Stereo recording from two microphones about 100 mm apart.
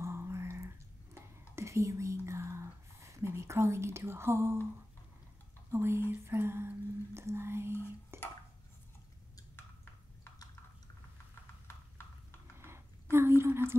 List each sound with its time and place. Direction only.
0.0 s a sound: 30° right (ahead or behind)
1.5 s whispering: 30° right (ahead or behind)
5.7 s whispering: 25° right (ahead or behind)
11.6 s clip-clop: 25° left (ahead or behind)
12.5 s whispering: 25° right (ahead or behind)